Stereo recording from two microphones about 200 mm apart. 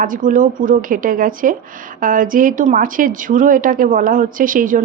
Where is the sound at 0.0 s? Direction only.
40° right (ahead or behind).